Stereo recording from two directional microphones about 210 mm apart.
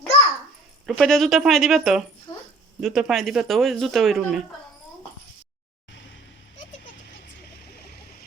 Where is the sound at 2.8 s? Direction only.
Centre (ahead or behind).